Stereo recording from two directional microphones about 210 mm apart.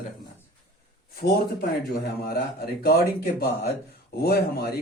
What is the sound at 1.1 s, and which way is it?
A man's voice, 50° left (ahead or behind).